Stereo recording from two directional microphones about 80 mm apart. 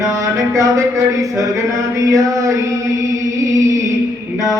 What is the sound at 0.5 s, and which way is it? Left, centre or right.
Speech, right.